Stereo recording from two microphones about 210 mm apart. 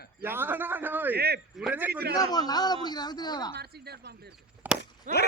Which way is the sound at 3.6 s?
50° right (ahead or behind).